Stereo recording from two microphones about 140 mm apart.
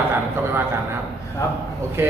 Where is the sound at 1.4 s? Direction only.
20° left (ahead or behind).